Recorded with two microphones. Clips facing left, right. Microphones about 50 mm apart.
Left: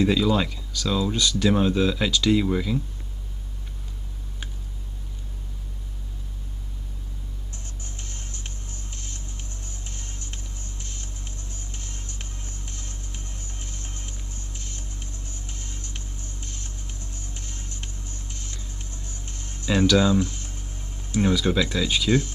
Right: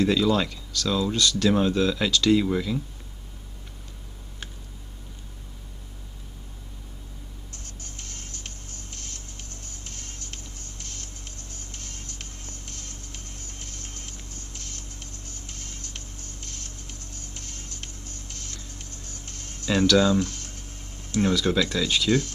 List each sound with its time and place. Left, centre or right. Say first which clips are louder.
0.0 s speech: left 1 dB; centre
7.5 s music: even; left
21.1 s speech: left 1 dB; centre